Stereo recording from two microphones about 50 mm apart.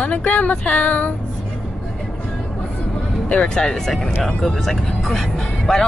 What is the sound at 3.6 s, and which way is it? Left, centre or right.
Speech, centre.